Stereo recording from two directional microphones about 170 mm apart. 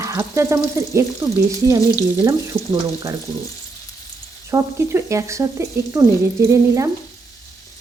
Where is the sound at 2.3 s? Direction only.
20° right (ahead or behind).